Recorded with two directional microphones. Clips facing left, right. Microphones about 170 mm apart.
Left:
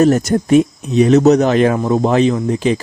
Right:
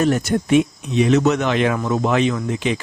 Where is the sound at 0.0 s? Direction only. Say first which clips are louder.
Left 6 dB; 40° left (ahead or behind).